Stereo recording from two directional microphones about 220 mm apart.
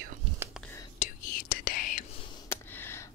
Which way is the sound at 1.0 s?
30° left (ahead or behind).